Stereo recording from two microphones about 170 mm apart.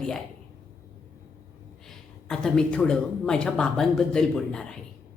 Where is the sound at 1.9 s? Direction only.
5° left (ahead or behind).